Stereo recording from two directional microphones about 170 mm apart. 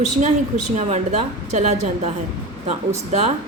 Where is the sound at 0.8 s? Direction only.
40° right (ahead or behind).